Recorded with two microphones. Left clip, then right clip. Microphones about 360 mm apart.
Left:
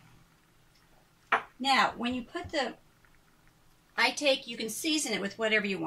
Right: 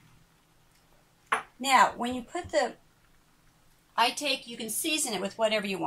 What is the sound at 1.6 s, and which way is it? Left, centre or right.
Speech, centre.